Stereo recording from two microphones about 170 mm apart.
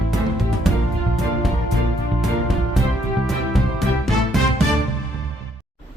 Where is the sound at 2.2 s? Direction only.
Centre (ahead or behind).